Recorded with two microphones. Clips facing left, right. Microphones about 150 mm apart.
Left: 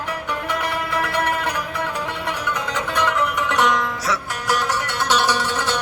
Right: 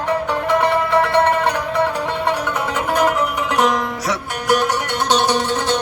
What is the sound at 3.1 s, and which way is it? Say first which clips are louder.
Music: right 3 dB; 35° right (ahead or behind).